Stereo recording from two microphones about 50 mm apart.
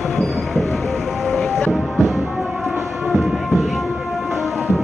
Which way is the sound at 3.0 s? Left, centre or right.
Centre.